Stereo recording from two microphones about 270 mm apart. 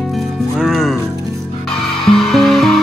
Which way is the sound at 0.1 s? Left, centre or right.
Centre.